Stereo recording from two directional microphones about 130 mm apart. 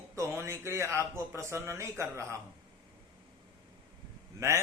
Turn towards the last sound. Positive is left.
turn(degrees=-20)  # may be behind; listen again after turning